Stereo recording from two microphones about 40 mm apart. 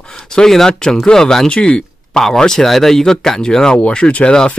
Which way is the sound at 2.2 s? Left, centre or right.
Centre.